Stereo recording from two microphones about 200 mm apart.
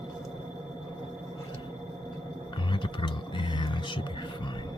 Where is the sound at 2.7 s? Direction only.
25° left (ahead or behind).